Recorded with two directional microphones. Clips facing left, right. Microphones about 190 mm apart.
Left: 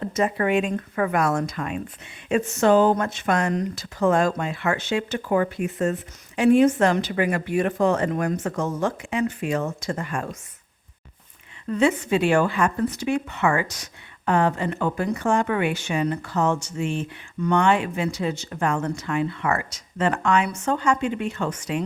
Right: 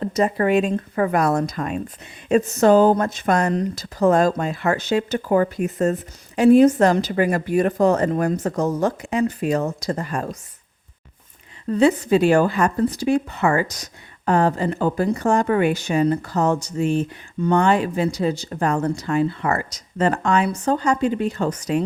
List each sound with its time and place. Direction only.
0.0 s speech: 35° right (ahead or behind)
11.7 s speech: 35° right (ahead or behind)